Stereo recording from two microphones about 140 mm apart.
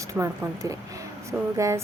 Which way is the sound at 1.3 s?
10° right (ahead or behind).